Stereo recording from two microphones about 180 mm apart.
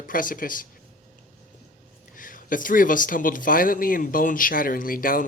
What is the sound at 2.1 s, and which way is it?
Speech, 50° left (ahead or behind).